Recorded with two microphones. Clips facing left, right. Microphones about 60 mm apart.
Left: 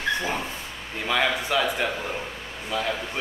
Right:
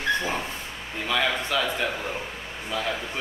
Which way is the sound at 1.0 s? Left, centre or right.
Centre.